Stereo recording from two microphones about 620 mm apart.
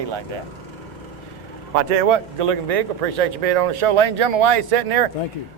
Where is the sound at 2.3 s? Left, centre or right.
Right.